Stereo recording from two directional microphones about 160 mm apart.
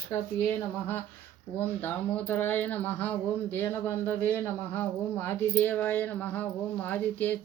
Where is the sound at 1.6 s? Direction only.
10° left (ahead or behind).